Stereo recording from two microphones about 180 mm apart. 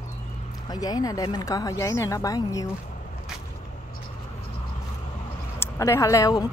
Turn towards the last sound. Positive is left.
turn(degrees=20)  # may be behind; listen again after turning